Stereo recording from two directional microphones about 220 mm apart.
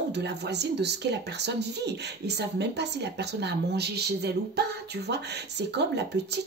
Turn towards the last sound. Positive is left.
turn(degrees=-50)  # may be behind; listen again after turning